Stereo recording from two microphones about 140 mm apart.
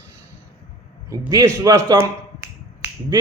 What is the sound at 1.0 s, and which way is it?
Speech, 20° right (ahead or behind).